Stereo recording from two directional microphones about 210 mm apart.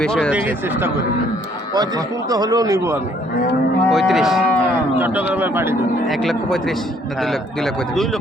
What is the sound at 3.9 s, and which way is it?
Speech, centre (ahead or behind).